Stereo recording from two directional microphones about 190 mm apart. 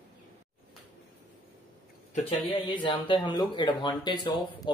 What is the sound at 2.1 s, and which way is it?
Speech, 30° left (ahead or behind).